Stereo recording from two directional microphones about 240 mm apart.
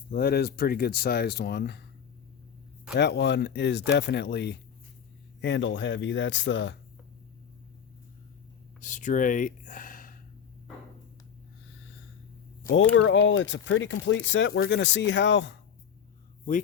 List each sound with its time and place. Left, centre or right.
0.1 s speech: left
2.9 s speech: left
8.8 s speech: left
12.7 s speech: left